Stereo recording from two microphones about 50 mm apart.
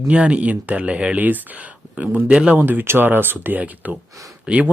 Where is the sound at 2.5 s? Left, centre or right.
Right.